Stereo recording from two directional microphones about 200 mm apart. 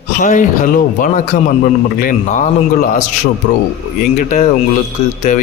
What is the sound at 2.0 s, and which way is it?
Speech, 40° left (ahead or behind).